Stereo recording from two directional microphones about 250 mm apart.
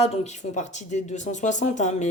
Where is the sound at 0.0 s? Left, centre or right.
Left.